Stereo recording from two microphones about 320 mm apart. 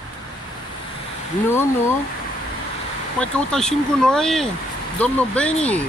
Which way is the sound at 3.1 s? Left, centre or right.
Centre.